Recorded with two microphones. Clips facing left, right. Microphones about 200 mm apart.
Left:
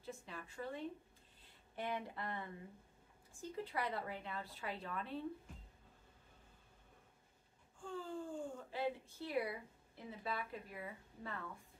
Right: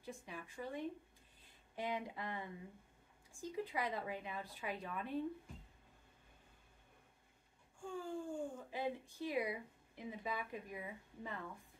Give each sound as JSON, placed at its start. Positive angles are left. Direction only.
{"t": 0.0, "sound": "speech", "side_deg": -15}
{"t": 7.8, "sound": "speech", "side_deg": -15}